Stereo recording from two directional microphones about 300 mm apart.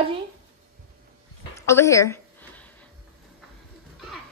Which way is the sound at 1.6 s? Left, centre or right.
Centre.